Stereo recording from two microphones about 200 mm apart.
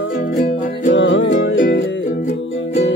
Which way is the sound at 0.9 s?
65° left (ahead or behind).